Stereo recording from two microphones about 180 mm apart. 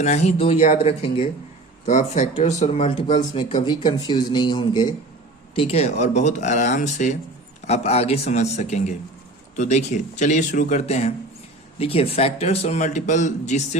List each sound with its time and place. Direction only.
0.0 s speech: 40° left (ahead or behind)
1.9 s speech: 45° left (ahead or behind)